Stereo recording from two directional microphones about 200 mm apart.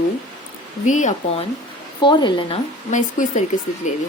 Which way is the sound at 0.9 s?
40° left (ahead or behind).